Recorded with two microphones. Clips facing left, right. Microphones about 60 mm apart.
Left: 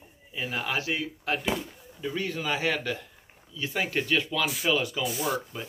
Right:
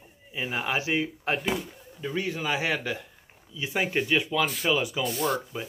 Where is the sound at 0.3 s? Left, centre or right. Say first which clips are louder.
Right 2 dB; centre.